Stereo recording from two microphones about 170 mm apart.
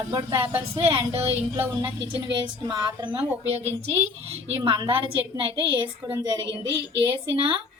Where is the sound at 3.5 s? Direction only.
40° right (ahead or behind).